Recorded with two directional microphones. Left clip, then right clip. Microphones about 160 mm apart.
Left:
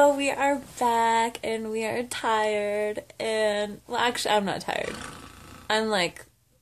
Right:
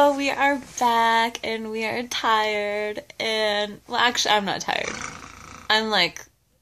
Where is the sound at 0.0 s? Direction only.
20° left (ahead or behind).